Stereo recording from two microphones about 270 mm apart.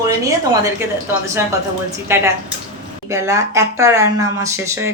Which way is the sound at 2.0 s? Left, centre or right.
Centre.